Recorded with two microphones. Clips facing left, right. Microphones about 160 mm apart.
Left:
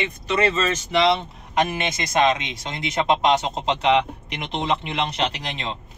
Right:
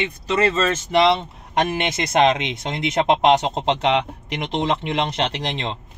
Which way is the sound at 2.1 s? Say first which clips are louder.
Right 3 dB; 60° right (ahead or behind).